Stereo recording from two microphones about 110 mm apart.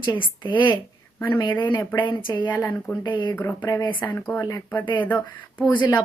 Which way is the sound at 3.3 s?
20° left (ahead or behind).